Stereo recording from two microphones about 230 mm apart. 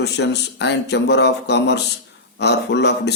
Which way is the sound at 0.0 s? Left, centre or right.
Left.